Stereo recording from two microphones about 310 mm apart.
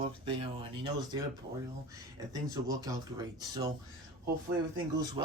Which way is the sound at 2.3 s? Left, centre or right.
Centre.